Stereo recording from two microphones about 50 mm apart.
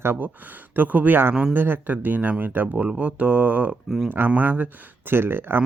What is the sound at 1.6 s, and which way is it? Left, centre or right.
Speech, right.